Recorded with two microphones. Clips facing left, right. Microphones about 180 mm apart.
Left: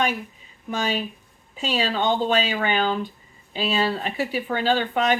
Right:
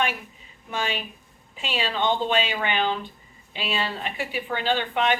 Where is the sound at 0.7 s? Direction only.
40° left (ahead or behind).